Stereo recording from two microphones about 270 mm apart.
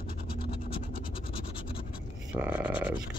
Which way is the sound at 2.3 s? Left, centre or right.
Centre.